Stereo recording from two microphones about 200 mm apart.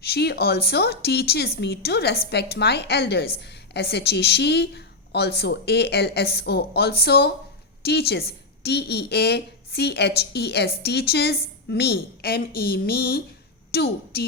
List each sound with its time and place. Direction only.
0.0 s a woman's voice: 55° left (ahead or behind)